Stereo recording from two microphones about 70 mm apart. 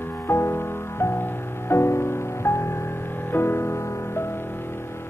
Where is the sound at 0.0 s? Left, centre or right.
Left.